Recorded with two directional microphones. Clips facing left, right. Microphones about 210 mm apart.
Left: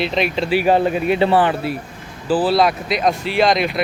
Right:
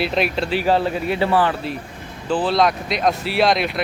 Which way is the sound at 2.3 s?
5° left (ahead or behind).